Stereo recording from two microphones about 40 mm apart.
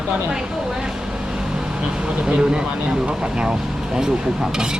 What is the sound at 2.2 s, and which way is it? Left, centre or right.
Speech, right.